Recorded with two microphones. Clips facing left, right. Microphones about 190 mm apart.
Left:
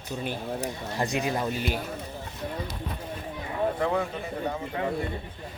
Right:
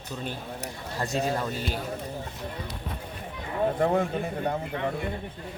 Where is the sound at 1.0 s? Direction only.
15° left (ahead or behind).